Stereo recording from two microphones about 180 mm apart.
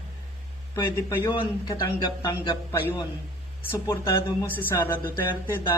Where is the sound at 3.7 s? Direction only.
15° left (ahead or behind).